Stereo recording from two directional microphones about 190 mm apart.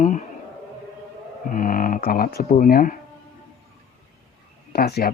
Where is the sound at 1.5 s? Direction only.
45° left (ahead or behind).